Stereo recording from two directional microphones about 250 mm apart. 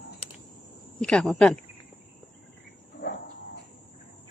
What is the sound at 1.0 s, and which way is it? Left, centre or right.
Speech, centre.